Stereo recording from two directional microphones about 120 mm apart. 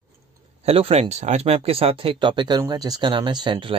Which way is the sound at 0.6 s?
55° right (ahead or behind).